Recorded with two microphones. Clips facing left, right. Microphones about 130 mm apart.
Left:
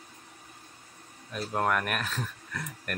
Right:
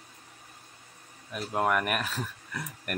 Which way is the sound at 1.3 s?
10° right (ahead or behind).